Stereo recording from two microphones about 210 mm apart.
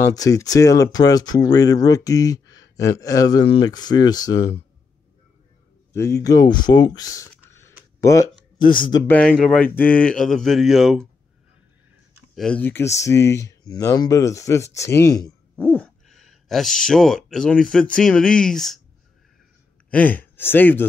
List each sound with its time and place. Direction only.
0.0 s speech: 15° left (ahead or behind)
5.9 s speech: 15° left (ahead or behind)
7.5 s a sound: 15° left (ahead or behind)
9.0 s speech: 5° left (ahead or behind)
12.4 s speech: 5° left (ahead or behind)
19.9 s speech: 5° left (ahead or behind)